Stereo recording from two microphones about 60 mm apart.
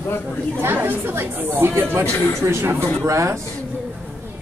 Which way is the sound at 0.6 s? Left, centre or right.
Right.